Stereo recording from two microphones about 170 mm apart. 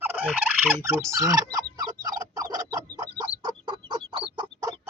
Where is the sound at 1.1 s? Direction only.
20° right (ahead or behind).